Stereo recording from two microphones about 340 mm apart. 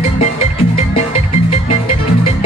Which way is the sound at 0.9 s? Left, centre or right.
Centre.